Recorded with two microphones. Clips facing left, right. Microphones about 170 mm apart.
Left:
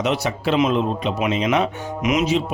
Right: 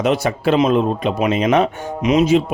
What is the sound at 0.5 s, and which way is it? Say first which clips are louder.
Speech: right 3 dB; 35° right (ahead or behind).